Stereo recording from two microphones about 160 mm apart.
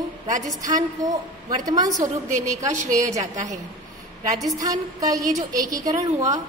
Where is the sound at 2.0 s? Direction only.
50° right (ahead or behind).